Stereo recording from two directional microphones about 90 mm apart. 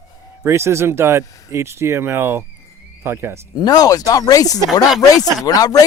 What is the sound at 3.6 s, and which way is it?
Speech, 45° left (ahead or behind).